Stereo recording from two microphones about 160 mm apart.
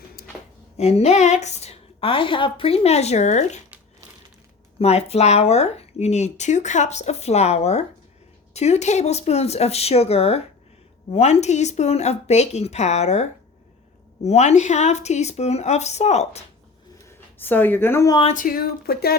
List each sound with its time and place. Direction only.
0.2 s a sound: 80° left
0.8 s a woman's voice: 40° left (ahead or behind)
4.8 s a woman's voice: 40° left (ahead or behind)
17.3 s speech: 10° left (ahead or behind)
18.3 s speech: 60° left (ahead or behind)